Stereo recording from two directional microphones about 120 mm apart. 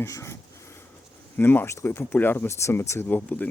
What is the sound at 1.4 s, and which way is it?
Speech, 15° left (ahead or behind).